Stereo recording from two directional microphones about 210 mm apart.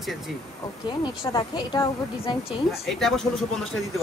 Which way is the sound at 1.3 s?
20° left (ahead or behind).